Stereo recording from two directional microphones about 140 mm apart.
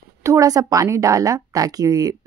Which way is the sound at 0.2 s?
20° right (ahead or behind).